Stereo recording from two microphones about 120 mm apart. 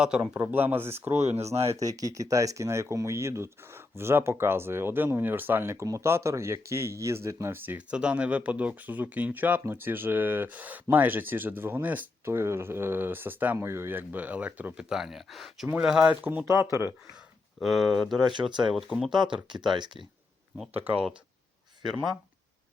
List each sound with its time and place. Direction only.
0.0 s speech: 5° right (ahead or behind)
0.3 s speech: 20° right (ahead or behind)
1.2 s speech: 65° right (ahead or behind)
1.6 s speech: 25° right (ahead or behind)
16.5 s speech: 25° right (ahead or behind)
17.6 s speech: centre (ahead or behind)
19.5 s speech: 40° right (ahead or behind)